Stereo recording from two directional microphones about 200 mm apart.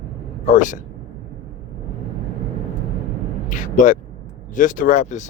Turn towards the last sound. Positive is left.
turn(degrees=35)  # may be behind; listen again after turning